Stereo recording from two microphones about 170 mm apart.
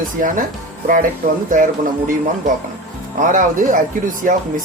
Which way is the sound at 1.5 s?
50° right (ahead or behind).